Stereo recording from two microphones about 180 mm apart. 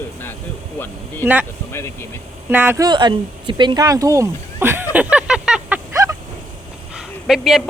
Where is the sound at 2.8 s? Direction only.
25° right (ahead or behind); by 5.7 s 5° right (ahead or behind).